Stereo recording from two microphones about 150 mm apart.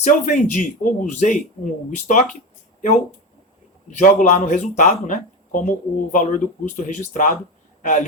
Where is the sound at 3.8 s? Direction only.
55° left (ahead or behind).